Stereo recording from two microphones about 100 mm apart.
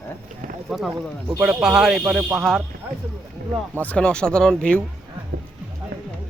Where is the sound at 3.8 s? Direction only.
10° left (ahead or behind).